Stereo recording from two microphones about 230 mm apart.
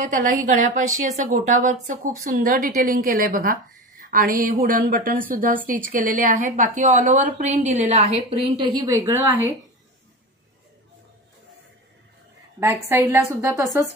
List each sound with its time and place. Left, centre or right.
0.0 s speech: right
8.8 s a woman's voice: centre
12.8 s a woman's voice: centre